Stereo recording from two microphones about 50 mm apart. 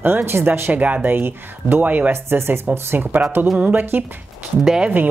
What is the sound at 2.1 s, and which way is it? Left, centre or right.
Speech, right.